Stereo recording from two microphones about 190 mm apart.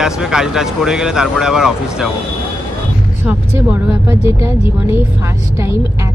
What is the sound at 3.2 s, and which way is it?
Speech, 5° right (ahead or behind).